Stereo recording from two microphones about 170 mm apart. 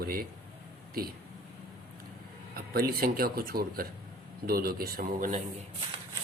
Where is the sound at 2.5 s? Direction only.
65° right (ahead or behind).